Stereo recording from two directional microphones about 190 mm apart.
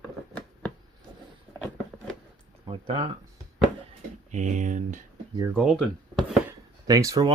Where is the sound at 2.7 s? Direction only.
30° right (ahead or behind).